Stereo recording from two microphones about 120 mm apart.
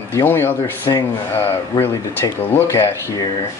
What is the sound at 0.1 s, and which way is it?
Speech, 20° left (ahead or behind).